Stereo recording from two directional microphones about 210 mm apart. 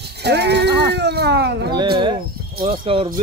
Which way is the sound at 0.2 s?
55° right (ahead or behind).